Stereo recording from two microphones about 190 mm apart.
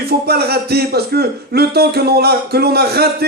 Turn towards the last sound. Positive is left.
turn(degrees=-55)  # may be behind; listen again after turning